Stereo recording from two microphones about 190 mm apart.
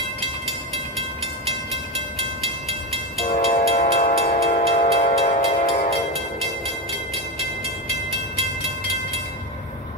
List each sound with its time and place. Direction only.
3.3 s train: 45° left (ahead or behind)
4.2 s train: 40° left (ahead or behind)
8.4 s train: 30° right (ahead or behind)